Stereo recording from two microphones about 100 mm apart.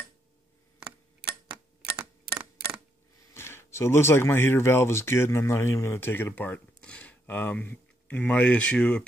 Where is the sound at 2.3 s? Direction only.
15° right (ahead or behind).